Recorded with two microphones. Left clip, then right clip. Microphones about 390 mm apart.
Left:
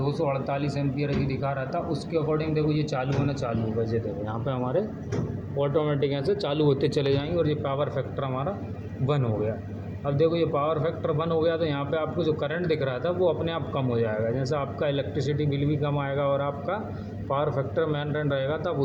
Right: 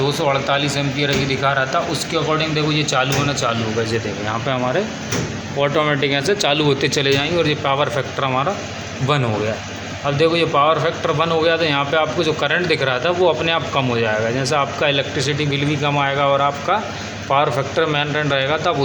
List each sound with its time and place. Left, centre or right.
0.1 s a man's voice: left
5.5 s a man's voice: left
10.1 s a man's voice: left